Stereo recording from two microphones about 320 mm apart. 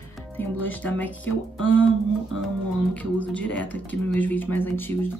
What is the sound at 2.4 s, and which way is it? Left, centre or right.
Speech, centre.